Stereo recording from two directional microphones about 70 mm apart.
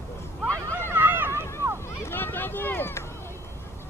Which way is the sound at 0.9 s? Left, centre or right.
Right.